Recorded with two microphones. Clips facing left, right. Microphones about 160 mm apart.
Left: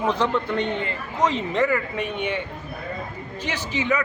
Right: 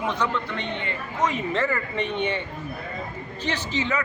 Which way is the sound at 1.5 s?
10° left (ahead or behind).